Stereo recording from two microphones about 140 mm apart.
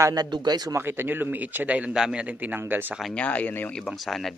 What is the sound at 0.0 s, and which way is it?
Speech, 25° right (ahead or behind).